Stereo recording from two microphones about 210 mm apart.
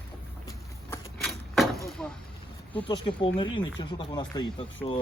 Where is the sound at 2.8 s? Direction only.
25° left (ahead or behind).